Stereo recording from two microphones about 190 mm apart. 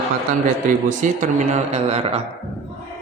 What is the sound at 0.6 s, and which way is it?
A man's voice, 40° right (ahead or behind).